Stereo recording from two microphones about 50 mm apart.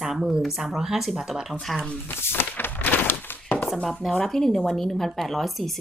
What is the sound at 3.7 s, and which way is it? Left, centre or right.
A woman's voice, centre.